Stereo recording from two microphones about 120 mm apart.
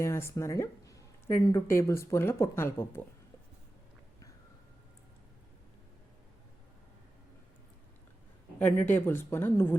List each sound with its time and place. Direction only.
0.0 s speech: 20° left (ahead or behind)
8.6 s speech: 15° left (ahead or behind)